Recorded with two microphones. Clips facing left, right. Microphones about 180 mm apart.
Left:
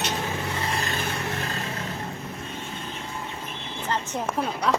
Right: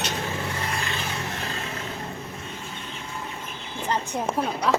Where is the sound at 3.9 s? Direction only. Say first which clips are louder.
Right 2 dB; 15° right (ahead or behind).